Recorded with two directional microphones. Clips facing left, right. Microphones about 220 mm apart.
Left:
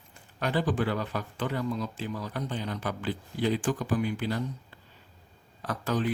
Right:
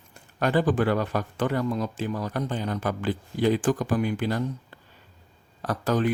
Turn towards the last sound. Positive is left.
turn(degrees=-40)  # may be behind; listen again after turning